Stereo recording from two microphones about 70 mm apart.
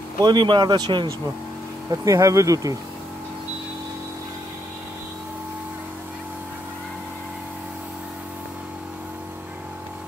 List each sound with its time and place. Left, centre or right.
0.2 s speech: right
1.9 s speech: right